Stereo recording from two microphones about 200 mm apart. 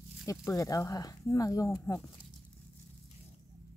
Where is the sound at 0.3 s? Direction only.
15° left (ahead or behind).